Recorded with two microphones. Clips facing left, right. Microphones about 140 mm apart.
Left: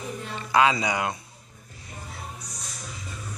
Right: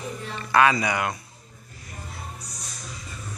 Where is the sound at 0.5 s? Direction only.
15° left (ahead or behind).